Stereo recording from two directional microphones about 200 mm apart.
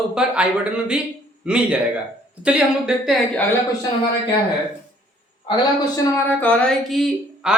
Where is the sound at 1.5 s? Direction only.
5° right (ahead or behind).